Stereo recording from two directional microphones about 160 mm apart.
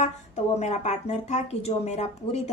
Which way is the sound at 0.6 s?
45° left (ahead or behind).